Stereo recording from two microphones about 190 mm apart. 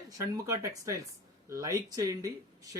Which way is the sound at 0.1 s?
15° right (ahead or behind).